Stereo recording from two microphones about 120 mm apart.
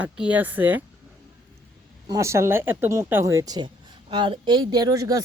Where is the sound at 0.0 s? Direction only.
10° right (ahead or behind).